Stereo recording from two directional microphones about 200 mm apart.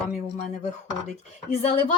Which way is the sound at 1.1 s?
30° left (ahead or behind).